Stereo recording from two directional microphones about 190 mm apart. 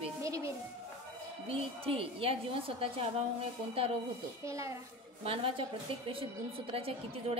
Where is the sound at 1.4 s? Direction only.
30° right (ahead or behind).